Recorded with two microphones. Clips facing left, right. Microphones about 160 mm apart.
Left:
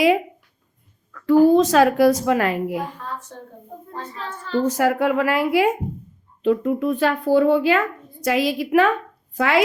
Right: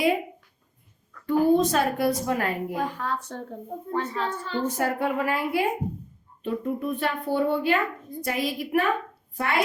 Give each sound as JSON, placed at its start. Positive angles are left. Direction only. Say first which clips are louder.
{"t": 1.1, "sound": "a woman's voice", "louder": "left 7 dB", "side_deg": 90}
{"t": 3.0, "sound": "a woman's voice", "louder": "right 3 dB", "side_deg": -75}
{"t": 4.6, "sound": "a woman's voice", "louder": "left 7 dB", "side_deg": 90}